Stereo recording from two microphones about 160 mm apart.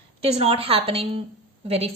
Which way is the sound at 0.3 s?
40° right (ahead or behind).